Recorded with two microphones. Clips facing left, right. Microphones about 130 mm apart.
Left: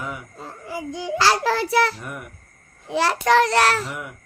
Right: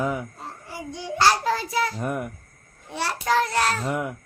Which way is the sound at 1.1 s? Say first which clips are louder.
Left 1 dB; 90° left.